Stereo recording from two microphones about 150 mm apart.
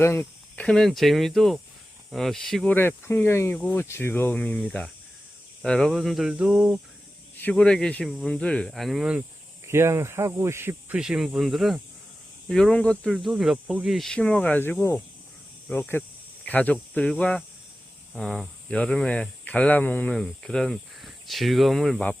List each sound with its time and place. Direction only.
0.0 s speech: 15° left (ahead or behind)
2.7 s speech: 15° left (ahead or behind); by 6.7 s 5° right (ahead or behind)
7.4 s speech: 5° left (ahead or behind)
9.6 s speech: 15° right (ahead or behind); by 13.1 s 5° left (ahead or behind)
13.1 s speech: 5° right (ahead or behind)